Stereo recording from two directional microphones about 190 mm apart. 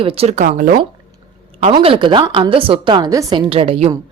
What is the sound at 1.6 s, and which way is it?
Speech, 30° right (ahead or behind).